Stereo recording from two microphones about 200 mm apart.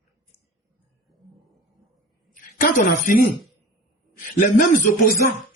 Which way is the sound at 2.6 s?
40° left (ahead or behind).